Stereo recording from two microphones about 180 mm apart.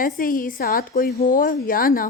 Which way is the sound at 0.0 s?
50° left (ahead or behind).